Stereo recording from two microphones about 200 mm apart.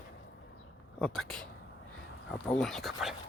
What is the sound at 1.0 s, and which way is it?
Speech, centre (ahead or behind).